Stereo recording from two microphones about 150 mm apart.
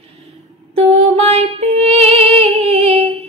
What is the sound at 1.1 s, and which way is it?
Female singing, 45° right (ahead or behind).